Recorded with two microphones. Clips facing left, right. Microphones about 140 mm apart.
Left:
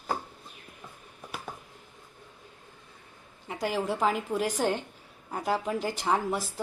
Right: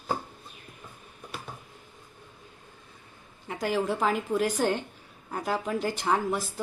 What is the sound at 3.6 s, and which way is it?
A woman's voice, 25° left (ahead or behind).